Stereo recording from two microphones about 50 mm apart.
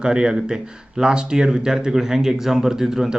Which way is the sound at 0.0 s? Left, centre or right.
Centre.